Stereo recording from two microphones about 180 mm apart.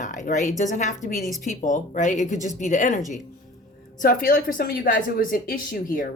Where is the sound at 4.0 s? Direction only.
50° left (ahead or behind).